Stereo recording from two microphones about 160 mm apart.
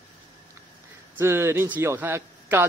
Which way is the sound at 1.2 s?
15° right (ahead or behind).